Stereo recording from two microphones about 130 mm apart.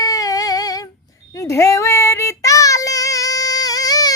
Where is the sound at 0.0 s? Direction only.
25° left (ahead or behind).